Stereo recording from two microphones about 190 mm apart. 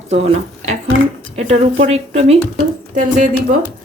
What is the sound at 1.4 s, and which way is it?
A woman's voice, 30° right (ahead or behind).